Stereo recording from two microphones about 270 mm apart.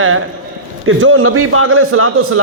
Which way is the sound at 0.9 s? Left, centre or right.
Right.